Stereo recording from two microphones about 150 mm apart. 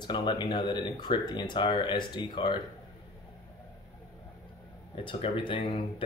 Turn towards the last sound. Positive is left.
turn(degrees=35)  # may be behind; listen again after turning